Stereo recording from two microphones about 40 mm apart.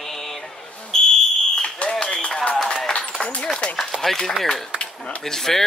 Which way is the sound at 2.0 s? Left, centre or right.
Left.